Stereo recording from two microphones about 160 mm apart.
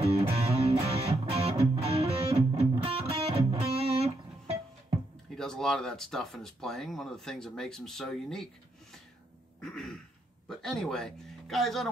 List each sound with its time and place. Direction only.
0.3 s music: 40° right (ahead or behind)
5.3 s speech: 5° left (ahead or behind)
9.6 s throat clearing: centre (ahead or behind)
10.5 s speech: centre (ahead or behind)